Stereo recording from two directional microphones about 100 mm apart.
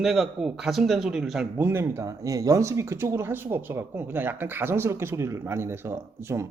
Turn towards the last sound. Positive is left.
turn(degrees=-25)  # may be behind; listen again after turning